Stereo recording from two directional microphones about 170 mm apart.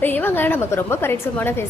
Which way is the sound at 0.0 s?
10° left (ahead or behind).